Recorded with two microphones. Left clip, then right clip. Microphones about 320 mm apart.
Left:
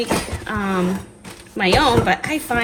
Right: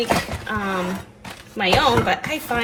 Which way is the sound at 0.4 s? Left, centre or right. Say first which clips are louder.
Left 1 dB; left.